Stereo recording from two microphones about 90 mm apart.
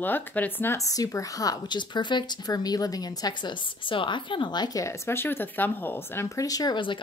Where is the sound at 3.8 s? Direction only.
65° left (ahead or behind); by 4.9 s 45° left (ahead or behind).